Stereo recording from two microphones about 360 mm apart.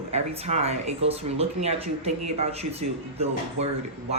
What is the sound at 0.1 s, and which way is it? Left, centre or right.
Speech, centre.